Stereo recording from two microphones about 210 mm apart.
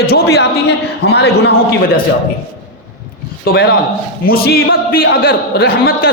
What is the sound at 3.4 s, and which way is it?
A man's voice, 50° left (ahead or behind).